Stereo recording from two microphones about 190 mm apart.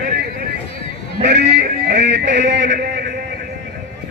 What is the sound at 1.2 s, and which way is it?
Music, 60° right (ahead or behind).